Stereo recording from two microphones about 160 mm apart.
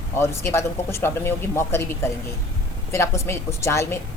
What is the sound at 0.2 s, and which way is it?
A woman's voice, 15° left (ahead or behind).